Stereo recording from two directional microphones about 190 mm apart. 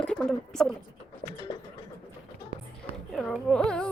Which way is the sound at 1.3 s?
20° left (ahead or behind).